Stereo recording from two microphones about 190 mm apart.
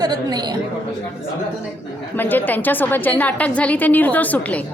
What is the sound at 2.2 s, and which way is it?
A woman's voice, 10° left (ahead or behind).